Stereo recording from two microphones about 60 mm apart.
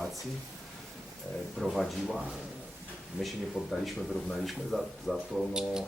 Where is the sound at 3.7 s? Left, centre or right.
Centre.